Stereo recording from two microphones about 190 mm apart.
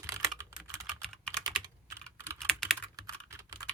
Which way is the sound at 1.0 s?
5° left (ahead or behind).